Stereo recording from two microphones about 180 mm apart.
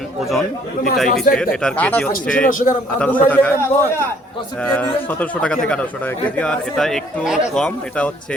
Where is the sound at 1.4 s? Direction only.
5° left (ahead or behind).